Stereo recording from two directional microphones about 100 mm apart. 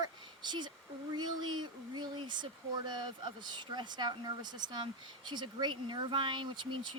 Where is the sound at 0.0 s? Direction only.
50° right (ahead or behind).